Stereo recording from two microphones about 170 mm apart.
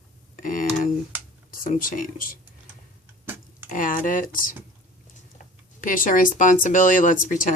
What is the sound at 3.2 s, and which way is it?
Tick-tock, 10° right (ahead or behind).